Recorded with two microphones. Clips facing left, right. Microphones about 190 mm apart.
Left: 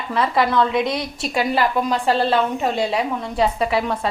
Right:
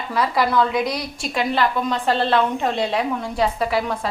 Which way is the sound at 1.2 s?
5° left (ahead or behind).